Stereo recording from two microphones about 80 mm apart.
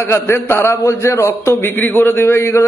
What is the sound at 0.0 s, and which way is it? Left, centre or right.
A man's voice, left.